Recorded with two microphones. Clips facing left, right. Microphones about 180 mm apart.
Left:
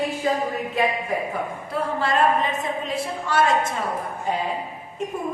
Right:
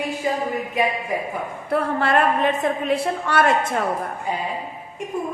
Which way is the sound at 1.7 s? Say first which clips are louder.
Right 5 dB; 60° right (ahead or behind).